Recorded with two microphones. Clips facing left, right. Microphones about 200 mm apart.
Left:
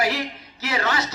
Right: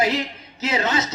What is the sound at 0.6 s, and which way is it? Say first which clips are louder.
Speech: right 3 dB; 20° right (ahead or behind).